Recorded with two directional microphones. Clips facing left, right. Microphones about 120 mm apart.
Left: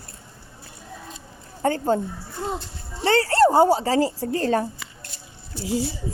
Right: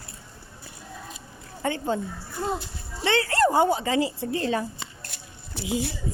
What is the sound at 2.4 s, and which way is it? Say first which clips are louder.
Speech: right 1 dB; 20° left (ahead or behind).